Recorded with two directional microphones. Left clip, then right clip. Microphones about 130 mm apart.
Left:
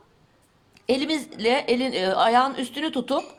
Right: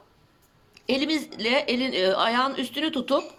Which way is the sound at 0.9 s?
55° left (ahead or behind).